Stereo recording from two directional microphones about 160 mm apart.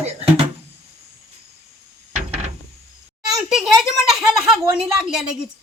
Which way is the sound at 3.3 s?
Centre (ahead or behind).